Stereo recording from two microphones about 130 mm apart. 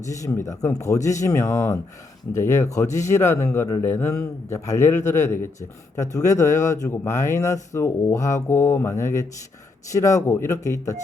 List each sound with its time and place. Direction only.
0.0 s speech: 25° left (ahead or behind)